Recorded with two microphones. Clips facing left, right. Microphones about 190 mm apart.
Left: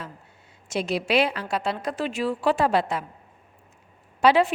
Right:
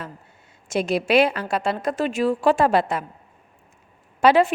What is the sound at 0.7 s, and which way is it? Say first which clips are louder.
A woman's voice: right 4 dB; 50° right (ahead or behind).